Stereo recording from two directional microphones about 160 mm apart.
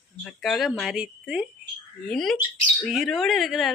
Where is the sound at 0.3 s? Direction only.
Centre (ahead or behind).